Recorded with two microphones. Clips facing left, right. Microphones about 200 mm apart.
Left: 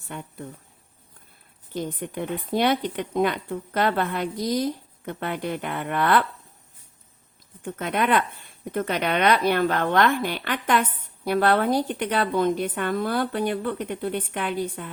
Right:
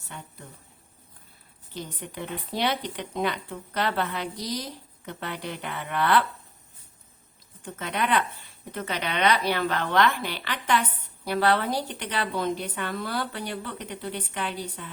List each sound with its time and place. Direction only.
1.7 s speech: 50° left (ahead or behind)
7.6 s speech: 50° left (ahead or behind)